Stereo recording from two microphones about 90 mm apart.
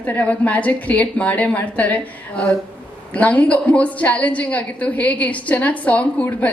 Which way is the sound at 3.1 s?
15° left (ahead or behind).